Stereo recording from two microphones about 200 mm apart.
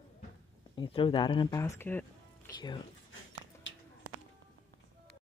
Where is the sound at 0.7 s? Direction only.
25° left (ahead or behind); by 2.5 s 10° left (ahead or behind).